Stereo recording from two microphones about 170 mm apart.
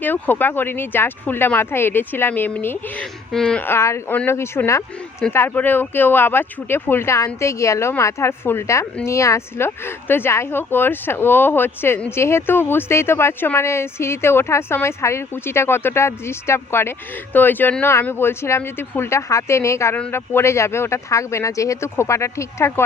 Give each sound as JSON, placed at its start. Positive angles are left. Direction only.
{"t": 0.0, "sound": "speech", "side_deg": 10}